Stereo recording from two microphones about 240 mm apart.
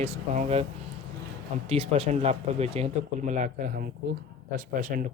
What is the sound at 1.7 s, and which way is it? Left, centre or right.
Speech, right.